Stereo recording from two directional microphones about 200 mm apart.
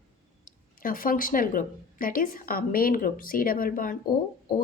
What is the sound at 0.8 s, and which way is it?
Speech, 45° left (ahead or behind).